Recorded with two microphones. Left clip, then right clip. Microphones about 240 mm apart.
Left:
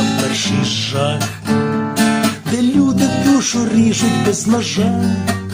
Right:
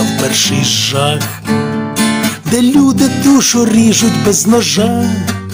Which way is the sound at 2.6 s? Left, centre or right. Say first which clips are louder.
Right 5 dB; right.